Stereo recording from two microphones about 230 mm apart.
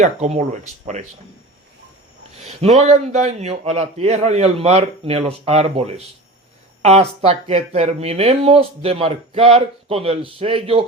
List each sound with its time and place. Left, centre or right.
0.0 s speech: right
2.6 s speech: right